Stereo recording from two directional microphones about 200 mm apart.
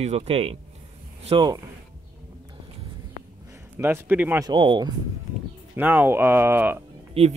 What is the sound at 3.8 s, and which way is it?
Speech, 10° right (ahead or behind).